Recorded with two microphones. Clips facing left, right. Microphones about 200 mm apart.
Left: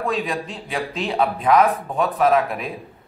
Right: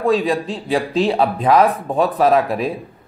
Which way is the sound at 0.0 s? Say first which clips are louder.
Right 7 dB; 35° right (ahead or behind).